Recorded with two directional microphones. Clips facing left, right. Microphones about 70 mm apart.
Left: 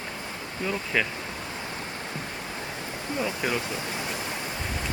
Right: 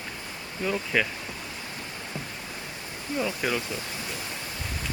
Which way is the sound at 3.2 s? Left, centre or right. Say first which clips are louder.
Even; centre.